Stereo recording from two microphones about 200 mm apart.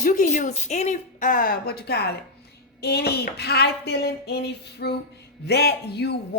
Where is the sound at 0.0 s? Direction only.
40° left (ahead or behind).